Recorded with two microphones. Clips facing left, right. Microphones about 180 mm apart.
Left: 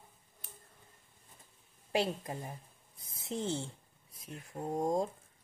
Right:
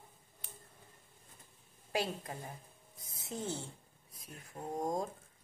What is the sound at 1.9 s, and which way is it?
A woman's voice, 25° left (ahead or behind).